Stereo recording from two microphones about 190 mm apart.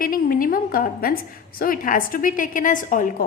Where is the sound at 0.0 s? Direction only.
45° left (ahead or behind).